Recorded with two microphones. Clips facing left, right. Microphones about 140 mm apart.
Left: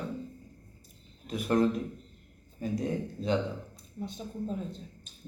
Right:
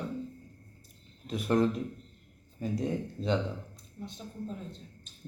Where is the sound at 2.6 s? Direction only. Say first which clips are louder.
Even; 30° right (ahead or behind).